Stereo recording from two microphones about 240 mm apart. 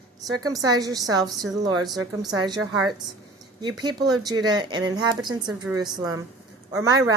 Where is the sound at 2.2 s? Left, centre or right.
Centre.